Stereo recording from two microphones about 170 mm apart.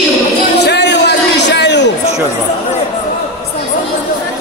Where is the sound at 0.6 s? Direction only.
90° left.